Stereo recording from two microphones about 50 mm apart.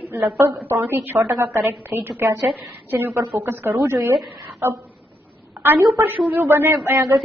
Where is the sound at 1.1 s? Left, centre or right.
Right.